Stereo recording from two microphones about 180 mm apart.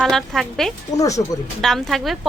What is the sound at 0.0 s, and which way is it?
Speech, centre (ahead or behind).